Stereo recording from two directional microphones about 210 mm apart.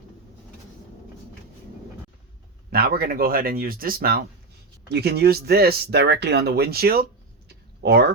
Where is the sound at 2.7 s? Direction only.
45° right (ahead or behind).